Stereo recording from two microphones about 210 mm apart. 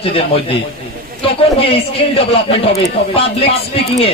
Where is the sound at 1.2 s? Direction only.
25° left (ahead or behind).